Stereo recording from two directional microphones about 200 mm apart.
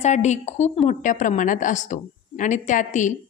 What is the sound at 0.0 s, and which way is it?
A woman's voice, 35° left (ahead or behind).